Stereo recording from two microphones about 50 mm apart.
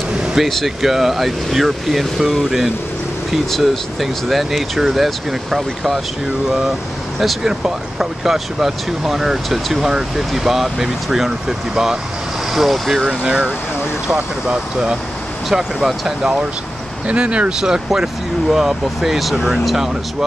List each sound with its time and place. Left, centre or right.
0.2 s air conditioning: centre
0.8 s speech: centre
7.2 s speech: centre
12.5 s speech: centre
13.2 s speech: centre
16.2 s speech: centre